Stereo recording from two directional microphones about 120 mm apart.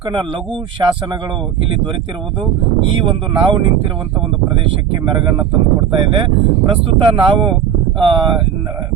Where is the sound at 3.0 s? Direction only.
45° right (ahead or behind).